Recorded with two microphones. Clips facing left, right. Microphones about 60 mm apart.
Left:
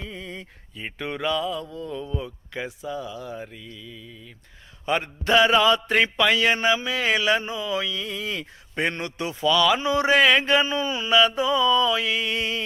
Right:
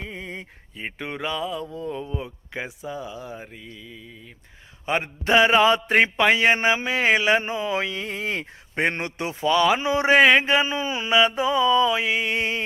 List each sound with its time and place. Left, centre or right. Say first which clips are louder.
0.0 s mantra: right 1 dB; right